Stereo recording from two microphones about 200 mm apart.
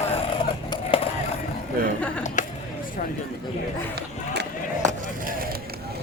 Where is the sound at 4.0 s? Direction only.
55° right (ahead or behind).